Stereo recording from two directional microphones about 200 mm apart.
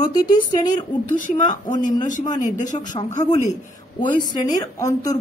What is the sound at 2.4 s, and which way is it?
A man's voice, 40° left (ahead or behind).